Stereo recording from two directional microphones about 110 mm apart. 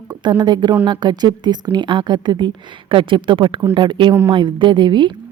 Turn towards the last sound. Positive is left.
turn(degrees=-45)  # may be behind; listen again after turning